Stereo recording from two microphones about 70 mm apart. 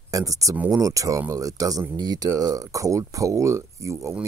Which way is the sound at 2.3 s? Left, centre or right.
Right.